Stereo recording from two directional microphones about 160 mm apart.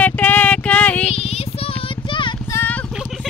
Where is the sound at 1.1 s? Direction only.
40° left (ahead or behind).